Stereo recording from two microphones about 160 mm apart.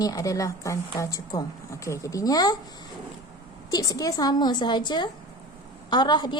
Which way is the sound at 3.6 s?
20° left (ahead or behind).